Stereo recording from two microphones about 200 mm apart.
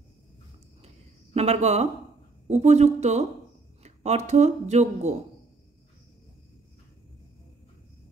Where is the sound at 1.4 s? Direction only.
30° right (ahead or behind).